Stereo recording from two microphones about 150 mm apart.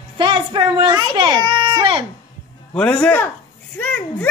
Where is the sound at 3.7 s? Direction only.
10° left (ahead or behind).